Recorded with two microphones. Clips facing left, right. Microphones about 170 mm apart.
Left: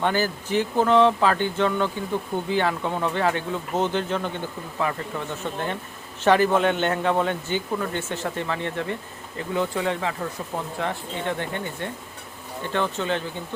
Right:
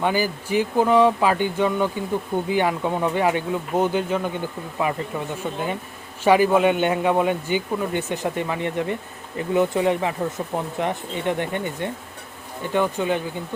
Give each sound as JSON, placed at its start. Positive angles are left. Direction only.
{"t": 0.0, "sound": "a man's voice", "side_deg": -10}
{"t": 6.2, "sound": "a man's voice", "side_deg": -10}